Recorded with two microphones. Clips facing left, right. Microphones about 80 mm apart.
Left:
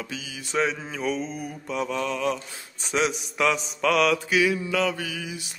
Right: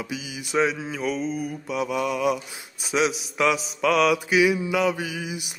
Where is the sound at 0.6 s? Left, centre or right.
Centre.